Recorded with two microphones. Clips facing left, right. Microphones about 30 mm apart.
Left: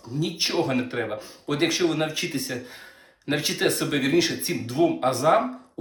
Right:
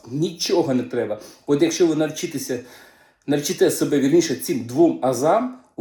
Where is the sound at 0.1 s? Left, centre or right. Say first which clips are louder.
Right 5 dB; left.